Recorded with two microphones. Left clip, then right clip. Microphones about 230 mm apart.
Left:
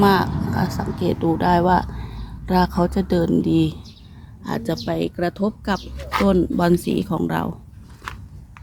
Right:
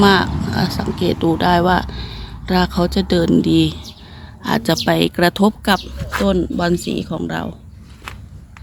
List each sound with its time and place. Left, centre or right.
0.0 s speech: centre
6.1 s speech: centre